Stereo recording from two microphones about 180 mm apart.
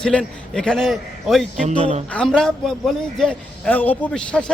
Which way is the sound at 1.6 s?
40° right (ahead or behind).